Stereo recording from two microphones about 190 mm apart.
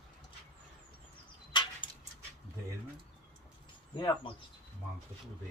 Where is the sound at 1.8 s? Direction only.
25° left (ahead or behind).